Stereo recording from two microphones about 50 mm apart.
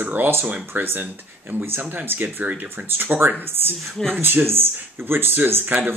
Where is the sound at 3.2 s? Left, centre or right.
Right.